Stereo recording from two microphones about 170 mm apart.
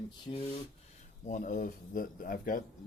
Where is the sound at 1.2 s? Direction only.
50° left (ahead or behind).